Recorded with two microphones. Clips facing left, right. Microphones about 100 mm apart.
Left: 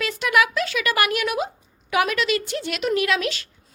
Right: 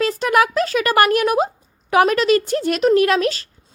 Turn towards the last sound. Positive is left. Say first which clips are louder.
# right 6 dB
turn(degrees=-40)  # may be behind; listen again after turning